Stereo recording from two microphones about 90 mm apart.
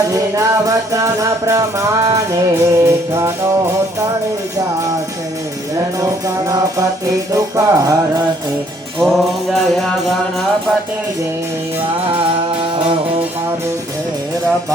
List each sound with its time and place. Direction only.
0.3 s music: 35° right (ahead or behind)
6.0 s music: 40° right (ahead or behind)
9.0 s music: centre (ahead or behind)